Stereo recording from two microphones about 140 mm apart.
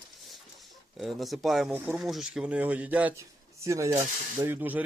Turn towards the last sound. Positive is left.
turn(degrees=-10)  # may be behind; listen again after turning